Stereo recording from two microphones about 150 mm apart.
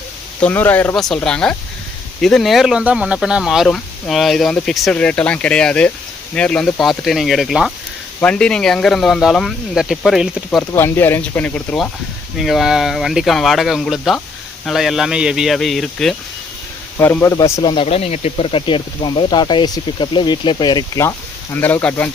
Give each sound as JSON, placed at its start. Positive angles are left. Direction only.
{"t": 0.3, "sound": "speech", "side_deg": 10}
{"t": 10.7, "sound": "speech", "side_deg": 15}
{"t": 17.0, "sound": "speech", "side_deg": 15}
{"t": 17.6, "sound": "speech", "side_deg": 30}
{"t": 17.8, "sound": "speech", "side_deg": 45}